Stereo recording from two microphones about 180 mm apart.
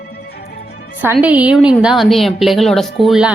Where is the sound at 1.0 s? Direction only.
10° right (ahead or behind).